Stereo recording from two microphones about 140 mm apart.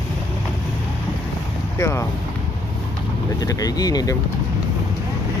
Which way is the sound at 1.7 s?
20° left (ahead or behind).